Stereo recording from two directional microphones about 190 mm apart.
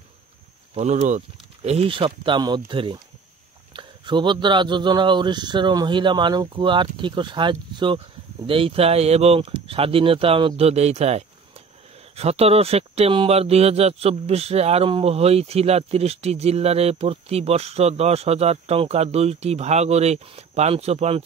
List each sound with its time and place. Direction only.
0.7 s speech: 35° right (ahead or behind)